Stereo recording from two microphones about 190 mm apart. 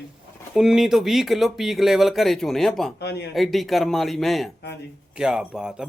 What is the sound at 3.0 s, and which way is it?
Speech, 60° left (ahead or behind).